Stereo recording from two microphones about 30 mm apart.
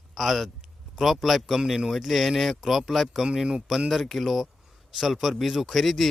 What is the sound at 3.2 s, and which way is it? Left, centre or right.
Speech, right.